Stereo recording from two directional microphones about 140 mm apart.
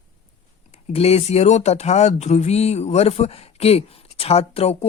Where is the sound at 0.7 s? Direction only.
50° left (ahead or behind).